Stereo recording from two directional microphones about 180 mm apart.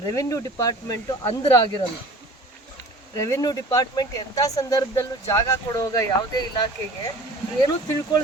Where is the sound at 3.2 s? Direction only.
15° left (ahead or behind).